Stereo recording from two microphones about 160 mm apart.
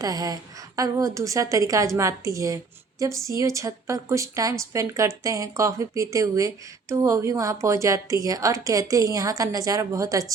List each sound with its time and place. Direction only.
0.0 s a woman's voice: 25° right (ahead or behind)